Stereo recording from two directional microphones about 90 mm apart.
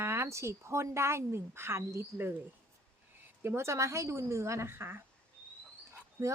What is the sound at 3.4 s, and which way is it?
A woman's voice, 30° right (ahead or behind).